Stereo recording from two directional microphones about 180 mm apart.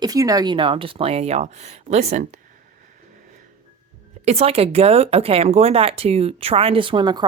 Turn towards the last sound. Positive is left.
turn(degrees=-25)  # may be behind; listen again after turning